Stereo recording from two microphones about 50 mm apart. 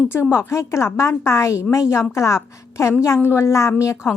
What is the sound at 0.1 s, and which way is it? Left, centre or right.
A woman's voice, left.